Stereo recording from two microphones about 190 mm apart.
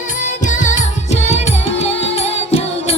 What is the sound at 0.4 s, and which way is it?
Music, 40° left (ahead or behind).